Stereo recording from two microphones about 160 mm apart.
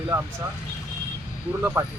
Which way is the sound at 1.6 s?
15° right (ahead or behind).